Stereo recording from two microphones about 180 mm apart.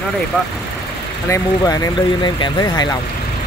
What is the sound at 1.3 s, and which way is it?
Speech, 20° left (ahead or behind).